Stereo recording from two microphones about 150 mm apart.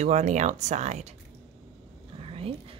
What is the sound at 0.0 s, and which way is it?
Speech, 55° right (ahead or behind).